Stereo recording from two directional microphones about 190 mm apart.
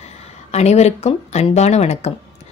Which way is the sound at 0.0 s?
35° left (ahead or behind).